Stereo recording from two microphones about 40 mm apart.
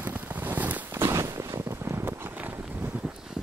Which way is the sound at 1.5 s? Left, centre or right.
Right.